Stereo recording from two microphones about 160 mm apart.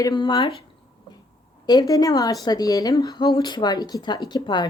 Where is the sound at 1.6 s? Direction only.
25° left (ahead or behind).